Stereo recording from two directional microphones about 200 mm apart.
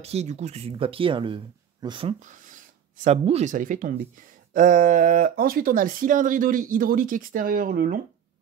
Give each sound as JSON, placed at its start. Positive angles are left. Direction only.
{"t": 0.0, "sound": "speech", "side_deg": -35}
{"t": 2.2, "sound": "speech", "side_deg": -40}